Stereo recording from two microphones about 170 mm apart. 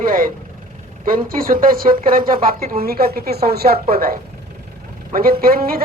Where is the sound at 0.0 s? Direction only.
55° right (ahead or behind).